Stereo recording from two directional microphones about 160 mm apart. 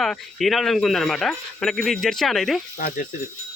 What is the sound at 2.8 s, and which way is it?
Speech, 60° left (ahead or behind).